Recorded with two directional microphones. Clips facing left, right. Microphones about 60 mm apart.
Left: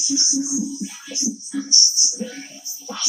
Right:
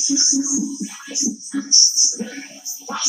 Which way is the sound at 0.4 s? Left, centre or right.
Centre.